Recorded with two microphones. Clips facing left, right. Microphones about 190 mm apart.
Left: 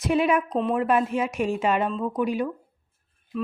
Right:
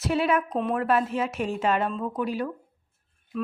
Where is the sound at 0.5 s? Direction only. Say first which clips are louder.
Left 2 dB; 5° right (ahead or behind).